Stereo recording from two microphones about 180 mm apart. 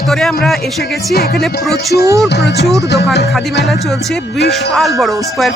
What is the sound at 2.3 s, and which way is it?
Speech, 70° left (ahead or behind).